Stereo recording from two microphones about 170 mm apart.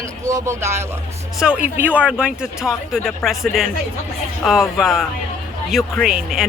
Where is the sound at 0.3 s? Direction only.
15° right (ahead or behind).